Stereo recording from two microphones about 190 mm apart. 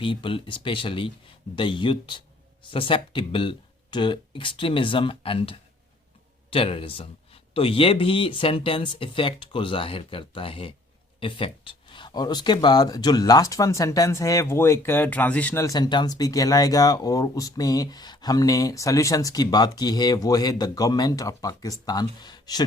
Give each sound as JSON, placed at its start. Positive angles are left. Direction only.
{"t": 0.0, "sound": "speech", "side_deg": 25}